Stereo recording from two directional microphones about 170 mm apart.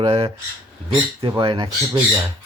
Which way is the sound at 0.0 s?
35° right (ahead or behind).